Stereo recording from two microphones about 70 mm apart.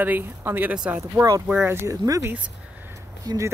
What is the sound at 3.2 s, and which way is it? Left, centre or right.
Speech, right.